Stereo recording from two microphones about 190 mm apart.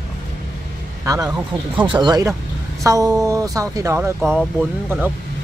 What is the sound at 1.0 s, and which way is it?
A man's voice, 20° right (ahead or behind).